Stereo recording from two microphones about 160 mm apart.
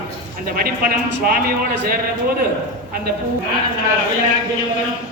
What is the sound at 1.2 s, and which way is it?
Speech, 70° right (ahead or behind).